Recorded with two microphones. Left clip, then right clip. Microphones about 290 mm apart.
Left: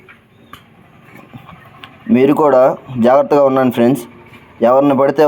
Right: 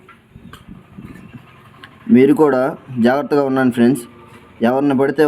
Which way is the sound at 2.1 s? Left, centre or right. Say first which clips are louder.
Left 2 dB; centre.